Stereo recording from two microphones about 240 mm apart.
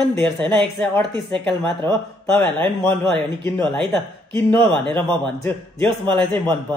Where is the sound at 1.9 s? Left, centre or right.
Centre.